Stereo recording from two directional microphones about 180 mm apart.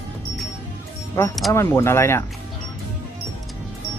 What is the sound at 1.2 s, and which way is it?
Speech, 15° left (ahead or behind).